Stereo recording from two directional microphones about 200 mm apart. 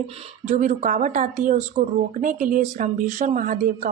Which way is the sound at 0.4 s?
40° right (ahead or behind).